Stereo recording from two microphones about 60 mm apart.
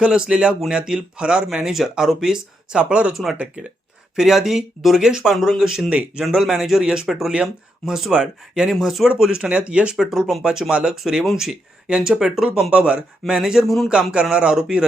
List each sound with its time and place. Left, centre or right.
0.0 s speech: centre
4.1 s speech: centre
8.8 s speech: centre
9.5 s speech: right
10.9 s speech: centre
11.9 s speech: centre
12.7 s speech: centre
13.7 s speech: centre
14.1 s speech: centre